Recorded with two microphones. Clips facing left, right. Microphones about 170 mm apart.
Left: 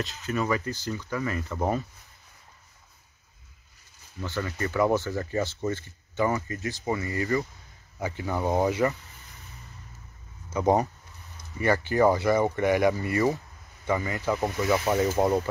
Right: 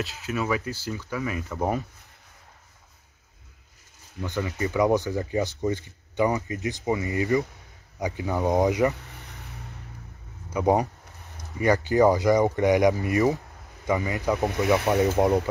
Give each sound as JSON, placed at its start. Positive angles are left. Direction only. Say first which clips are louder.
{"t": 0.0, "sound": "speech", "louder": "even", "side_deg": -5}
{"t": 4.2, "sound": "speech", "louder": "right 2 dB", "side_deg": -15}
{"t": 8.9, "sound": "a sound", "louder": "right 6 dB", "side_deg": -65}
{"t": 10.5, "sound": "speech", "louder": "right 1 dB", "side_deg": -10}